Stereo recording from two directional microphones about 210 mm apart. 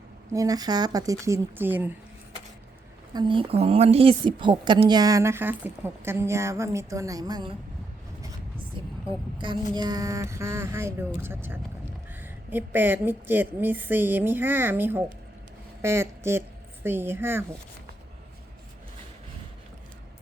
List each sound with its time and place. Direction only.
0.3 s a woman's voice: 15° right (ahead or behind)
3.1 s a woman's voice: 20° right (ahead or behind)
8.8 s a sound: 25° right (ahead or behind)
9.7 s a woman's voice: 20° right (ahead or behind)